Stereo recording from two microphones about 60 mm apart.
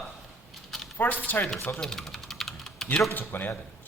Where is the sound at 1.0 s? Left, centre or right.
Left.